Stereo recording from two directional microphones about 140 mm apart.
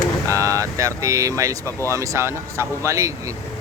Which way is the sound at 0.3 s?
20° right (ahead or behind).